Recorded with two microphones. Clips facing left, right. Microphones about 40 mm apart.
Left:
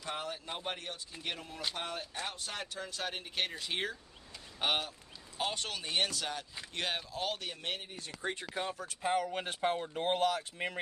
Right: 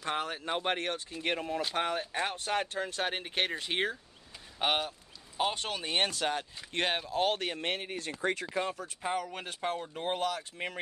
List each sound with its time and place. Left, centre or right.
0.0 s speech: right
1.2 s speech: right
4.6 s speech: centre; by 8.0 s right
8.2 s speech: right
9.1 s speech: centre